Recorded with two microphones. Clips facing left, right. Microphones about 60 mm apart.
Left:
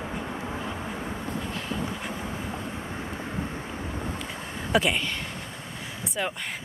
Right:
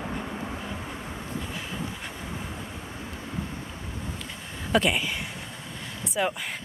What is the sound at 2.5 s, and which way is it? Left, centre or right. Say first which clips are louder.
Vehicle: left 4 dB; left.